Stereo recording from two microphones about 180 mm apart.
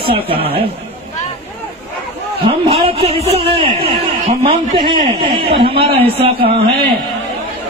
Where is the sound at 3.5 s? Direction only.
30° right (ahead or behind).